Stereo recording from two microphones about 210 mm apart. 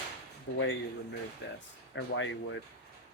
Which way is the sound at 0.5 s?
65° left (ahead or behind).